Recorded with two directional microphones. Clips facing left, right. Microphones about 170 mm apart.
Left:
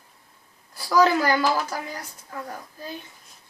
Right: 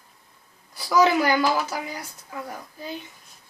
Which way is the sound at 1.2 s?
15° right (ahead or behind).